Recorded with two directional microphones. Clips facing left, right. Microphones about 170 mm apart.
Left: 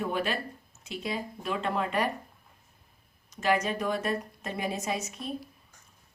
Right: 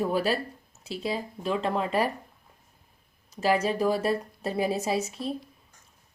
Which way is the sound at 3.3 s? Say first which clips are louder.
Right 3 dB; 30° right (ahead or behind).